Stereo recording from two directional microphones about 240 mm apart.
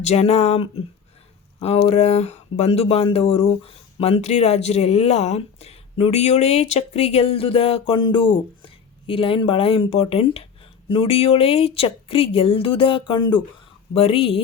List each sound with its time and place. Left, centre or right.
0.0 s speech: left